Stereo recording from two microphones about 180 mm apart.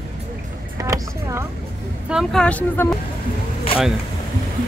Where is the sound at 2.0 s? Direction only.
Centre (ahead or behind).